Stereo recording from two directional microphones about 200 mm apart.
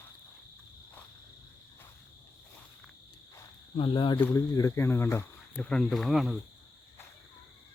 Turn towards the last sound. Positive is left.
turn(degrees=0)  # may be behind; listen again after turning